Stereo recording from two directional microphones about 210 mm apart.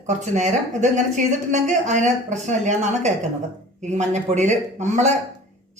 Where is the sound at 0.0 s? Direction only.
35° right (ahead or behind).